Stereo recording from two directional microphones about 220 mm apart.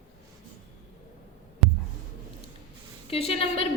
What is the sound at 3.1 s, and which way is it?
Speech, 25° left (ahead or behind).